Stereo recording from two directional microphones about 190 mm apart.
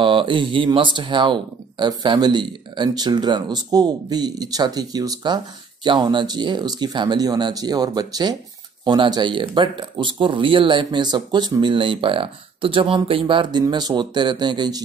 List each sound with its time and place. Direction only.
0.0 s speech: 25° right (ahead or behind)